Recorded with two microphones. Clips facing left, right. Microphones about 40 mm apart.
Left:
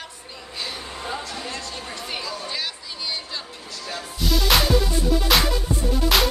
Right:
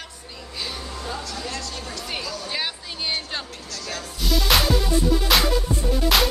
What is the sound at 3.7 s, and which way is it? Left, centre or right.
Music, centre.